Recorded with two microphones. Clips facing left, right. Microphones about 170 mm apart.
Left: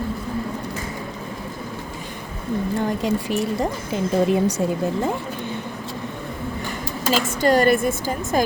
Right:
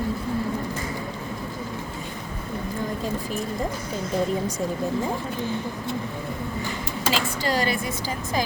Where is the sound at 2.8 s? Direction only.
75° left (ahead or behind).